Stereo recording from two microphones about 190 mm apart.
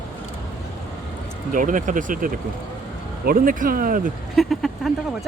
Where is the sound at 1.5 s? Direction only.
45° right (ahead or behind).